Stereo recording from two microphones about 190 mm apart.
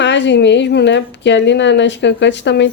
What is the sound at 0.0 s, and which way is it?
A woman's voice, 70° left (ahead or behind).